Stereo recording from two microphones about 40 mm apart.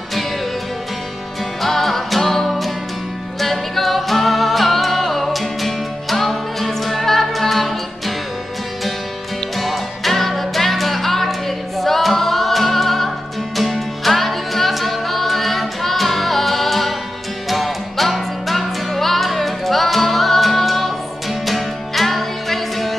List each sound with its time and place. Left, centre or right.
1.6 s music: centre
9.6 s music: centre